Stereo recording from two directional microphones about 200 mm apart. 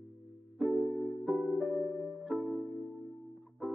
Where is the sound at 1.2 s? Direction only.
Centre (ahead or behind).